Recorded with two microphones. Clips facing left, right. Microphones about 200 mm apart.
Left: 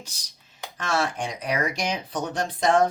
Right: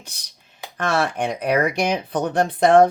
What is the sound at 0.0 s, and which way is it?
Speech, 60° right (ahead or behind).